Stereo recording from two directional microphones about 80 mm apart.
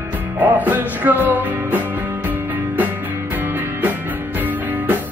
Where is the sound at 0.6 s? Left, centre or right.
Right.